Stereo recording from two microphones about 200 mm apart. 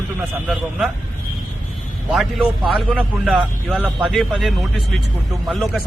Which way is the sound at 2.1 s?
Centre (ahead or behind).